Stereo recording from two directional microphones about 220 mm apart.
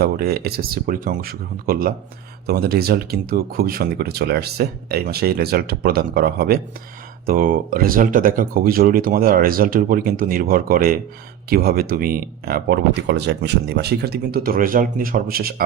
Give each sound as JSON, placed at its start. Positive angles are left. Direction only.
{"t": 0.0, "sound": "speech", "side_deg": -45}